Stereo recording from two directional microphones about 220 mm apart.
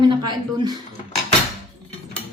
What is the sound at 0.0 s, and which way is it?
Speech, 20° right (ahead or behind).